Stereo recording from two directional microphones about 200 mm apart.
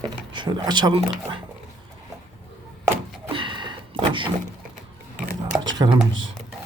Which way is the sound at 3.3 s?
25° right (ahead or behind).